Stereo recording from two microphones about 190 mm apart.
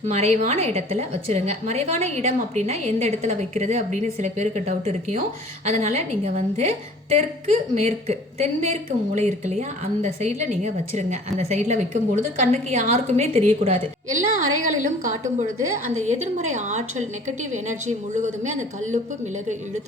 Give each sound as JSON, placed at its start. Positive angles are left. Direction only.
{"t": 0.1, "sound": "a woman's voice", "side_deg": -35}
{"t": 14.6, "sound": "a woman's voice", "side_deg": -40}